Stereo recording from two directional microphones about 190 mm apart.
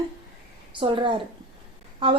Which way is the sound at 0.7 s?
25° right (ahead or behind).